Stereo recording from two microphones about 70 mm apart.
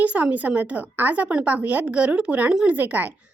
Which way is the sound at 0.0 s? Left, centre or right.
Right.